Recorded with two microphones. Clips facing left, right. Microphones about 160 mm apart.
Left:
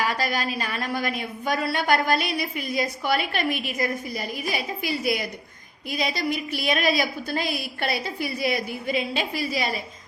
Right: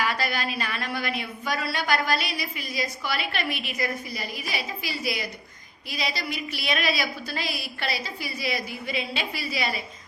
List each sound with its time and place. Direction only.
0.0 s a woman's voice: 40° left (ahead or behind)